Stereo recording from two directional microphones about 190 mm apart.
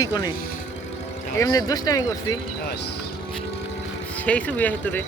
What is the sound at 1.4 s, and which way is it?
Speech, 20° left (ahead or behind).